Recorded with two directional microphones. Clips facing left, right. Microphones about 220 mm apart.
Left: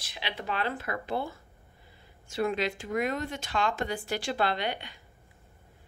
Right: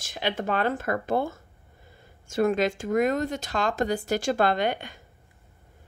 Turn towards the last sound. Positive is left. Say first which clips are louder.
# right 6 dB
turn(degrees=-45)  # may be behind; listen again after turning